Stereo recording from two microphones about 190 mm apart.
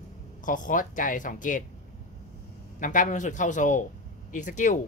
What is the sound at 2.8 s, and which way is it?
Speech, 40° left (ahead or behind).